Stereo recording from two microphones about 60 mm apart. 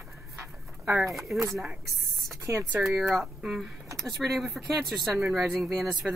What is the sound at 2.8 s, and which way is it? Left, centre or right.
Speech, centre.